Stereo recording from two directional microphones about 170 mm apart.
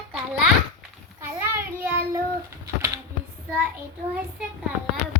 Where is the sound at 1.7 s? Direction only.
15° right (ahead or behind).